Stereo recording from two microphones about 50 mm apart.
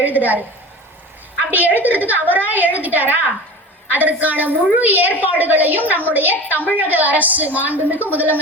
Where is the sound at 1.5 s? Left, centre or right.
Right.